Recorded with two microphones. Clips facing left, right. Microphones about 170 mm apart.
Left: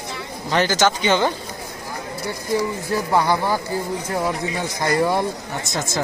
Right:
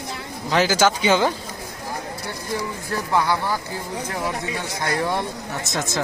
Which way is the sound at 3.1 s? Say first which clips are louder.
Left 2 dB; 15° left (ahead or behind).